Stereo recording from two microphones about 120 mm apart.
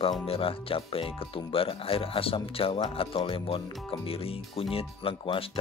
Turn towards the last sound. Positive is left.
turn(degrees=50)  # may be behind; listen again after turning